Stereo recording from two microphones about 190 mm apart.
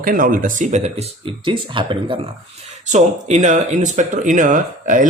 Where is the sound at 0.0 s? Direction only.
45° right (ahead or behind); by 2.1 s 25° right (ahead or behind).